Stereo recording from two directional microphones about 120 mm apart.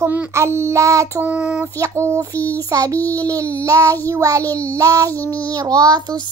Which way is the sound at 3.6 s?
25° right (ahead or behind).